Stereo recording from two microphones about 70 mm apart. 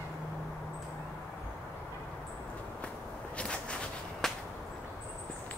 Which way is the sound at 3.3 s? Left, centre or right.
Centre.